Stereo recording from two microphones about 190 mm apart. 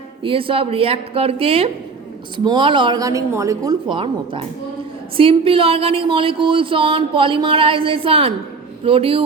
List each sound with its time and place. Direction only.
0.2 s speech: 30° right (ahead or behind)